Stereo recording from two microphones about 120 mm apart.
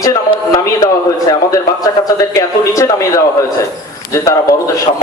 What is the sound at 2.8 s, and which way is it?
A man's voice, 30° left (ahead or behind).